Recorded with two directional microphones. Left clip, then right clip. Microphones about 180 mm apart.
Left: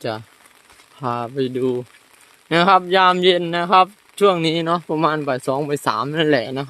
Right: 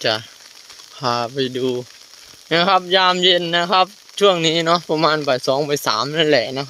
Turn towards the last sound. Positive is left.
turn(degrees=20)  # may be behind; listen again after turning